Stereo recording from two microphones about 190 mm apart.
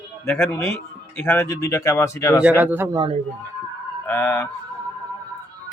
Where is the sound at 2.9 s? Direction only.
25° right (ahead or behind).